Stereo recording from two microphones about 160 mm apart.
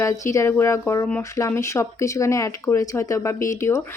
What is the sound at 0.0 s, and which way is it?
Speech, 20° left (ahead or behind).